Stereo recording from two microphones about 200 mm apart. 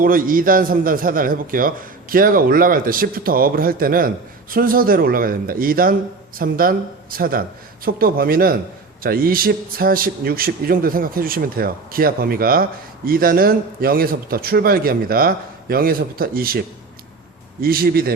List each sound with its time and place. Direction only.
0.0 s a man's voice: 45° right (ahead or behind)